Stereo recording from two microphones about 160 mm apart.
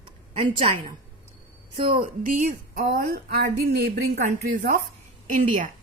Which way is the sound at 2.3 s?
55° right (ahead or behind).